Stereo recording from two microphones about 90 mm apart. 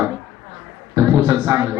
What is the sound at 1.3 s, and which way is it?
Speech, 35° right (ahead or behind).